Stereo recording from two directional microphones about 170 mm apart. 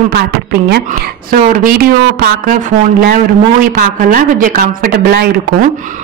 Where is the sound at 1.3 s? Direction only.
60° right (ahead or behind).